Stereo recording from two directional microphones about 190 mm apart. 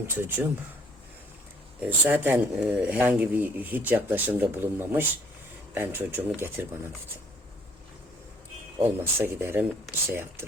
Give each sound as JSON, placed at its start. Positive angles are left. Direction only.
{"t": 0.0, "sound": "speech", "side_deg": -10}
{"t": 1.8, "sound": "speech", "side_deg": -10}
{"t": 8.8, "sound": "speech", "side_deg": -10}